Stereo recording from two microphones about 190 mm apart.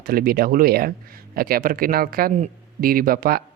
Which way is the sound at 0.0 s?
50° right (ahead or behind).